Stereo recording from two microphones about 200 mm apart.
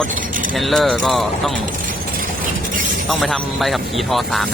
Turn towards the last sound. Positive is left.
turn(degrees=0)  # may be behind; listen again after turning